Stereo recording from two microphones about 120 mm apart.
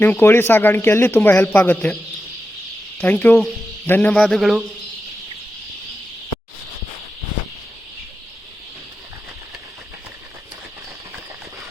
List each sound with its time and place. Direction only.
0.0 s speech: 20° left (ahead or behind)
3.0 s a man's voice: 15° left (ahead or behind); by 4.6 s centre (ahead or behind)